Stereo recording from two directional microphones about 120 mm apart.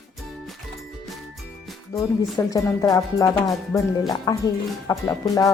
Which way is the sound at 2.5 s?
25° left (ahead or behind).